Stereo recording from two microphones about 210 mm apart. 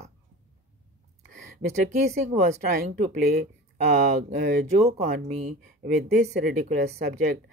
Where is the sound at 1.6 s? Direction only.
40° right (ahead or behind).